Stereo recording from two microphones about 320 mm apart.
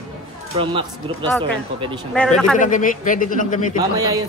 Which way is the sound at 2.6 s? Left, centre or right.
Left.